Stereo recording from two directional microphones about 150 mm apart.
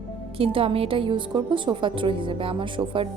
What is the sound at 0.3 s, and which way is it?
A woman's voice, 40° right (ahead or behind).